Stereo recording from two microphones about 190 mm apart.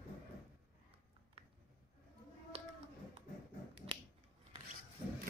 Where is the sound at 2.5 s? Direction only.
35° right (ahead or behind).